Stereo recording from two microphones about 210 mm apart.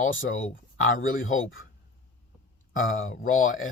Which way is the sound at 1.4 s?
70° left (ahead or behind).